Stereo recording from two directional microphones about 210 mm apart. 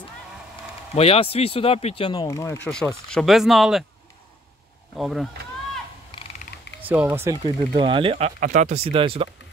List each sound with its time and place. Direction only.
0.9 s speech: 25° left (ahead or behind)
3.1 s speech: centre (ahead or behind)
4.9 s speech: centre (ahead or behind)
7.1 s speech: 15° right (ahead or behind)